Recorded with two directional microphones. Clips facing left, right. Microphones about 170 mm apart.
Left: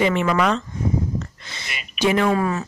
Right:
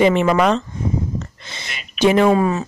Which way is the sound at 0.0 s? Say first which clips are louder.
Right 5 dB; 25° right (ahead or behind).